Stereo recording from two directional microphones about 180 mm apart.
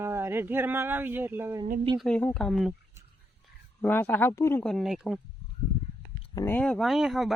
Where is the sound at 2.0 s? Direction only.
5° left (ahead or behind).